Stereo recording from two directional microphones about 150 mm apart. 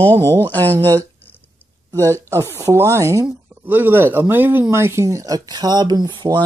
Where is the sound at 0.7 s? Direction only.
25° right (ahead or behind).